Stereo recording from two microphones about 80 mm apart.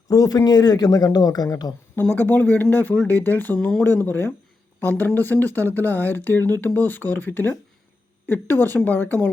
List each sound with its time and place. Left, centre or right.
0.1 s speech: left
2.0 s speech: left